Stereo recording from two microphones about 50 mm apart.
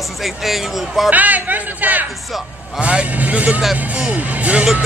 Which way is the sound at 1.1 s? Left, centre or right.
Right.